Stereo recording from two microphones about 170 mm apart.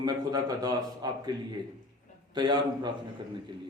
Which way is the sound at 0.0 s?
20° right (ahead or behind).